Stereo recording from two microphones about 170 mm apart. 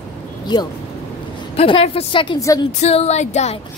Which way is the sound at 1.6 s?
35° left (ahead or behind).